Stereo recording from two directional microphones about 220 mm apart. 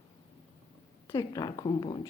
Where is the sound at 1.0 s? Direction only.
15° left (ahead or behind).